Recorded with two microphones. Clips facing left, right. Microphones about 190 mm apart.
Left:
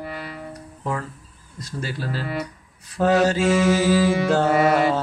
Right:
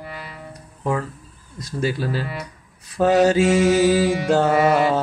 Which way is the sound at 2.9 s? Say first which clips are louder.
Right 3 dB; 15° right (ahead or behind).